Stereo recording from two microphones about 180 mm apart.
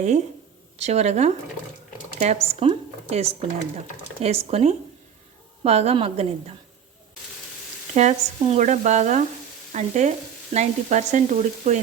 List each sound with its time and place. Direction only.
0.8 s stir: 35° right (ahead or behind)
2.1 s speech: 40° right (ahead or behind)
4.2 s stir: 35° right (ahead or behind)
7.9 s stir: 40° right (ahead or behind)